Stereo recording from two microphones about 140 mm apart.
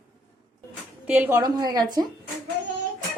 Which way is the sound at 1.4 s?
30° right (ahead or behind).